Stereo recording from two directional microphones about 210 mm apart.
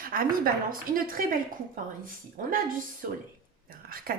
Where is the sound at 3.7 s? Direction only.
45° right (ahead or behind).